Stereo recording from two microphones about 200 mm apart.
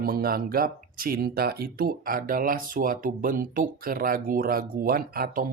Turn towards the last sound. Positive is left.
turn(degrees=-50)  # may be behind; listen again after turning